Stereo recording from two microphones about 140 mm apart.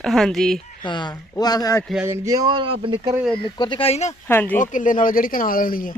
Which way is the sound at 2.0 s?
20° right (ahead or behind).